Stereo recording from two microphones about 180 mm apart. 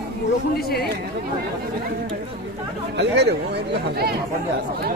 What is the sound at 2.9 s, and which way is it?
Speech, 70° right (ahead or behind).